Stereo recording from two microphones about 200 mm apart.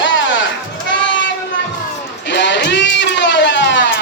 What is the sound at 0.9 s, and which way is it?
Crowd, 65° left (ahead or behind).